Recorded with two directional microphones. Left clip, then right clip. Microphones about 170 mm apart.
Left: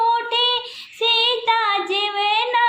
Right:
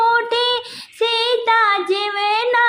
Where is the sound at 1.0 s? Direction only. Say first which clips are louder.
Right 1 dB; 35° right (ahead or behind).